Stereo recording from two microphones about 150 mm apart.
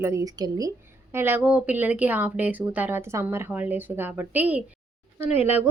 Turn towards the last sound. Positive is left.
turn(degrees=-15)  # may be behind; listen again after turning